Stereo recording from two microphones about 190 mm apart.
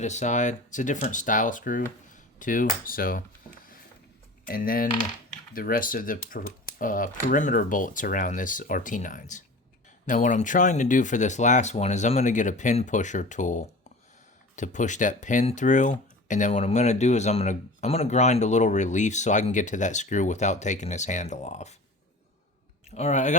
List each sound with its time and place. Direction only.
0.0 s speech: 40° left (ahead or behind)
4.4 s speech: 50° left (ahead or behind)
23.0 s speech: 35° left (ahead or behind)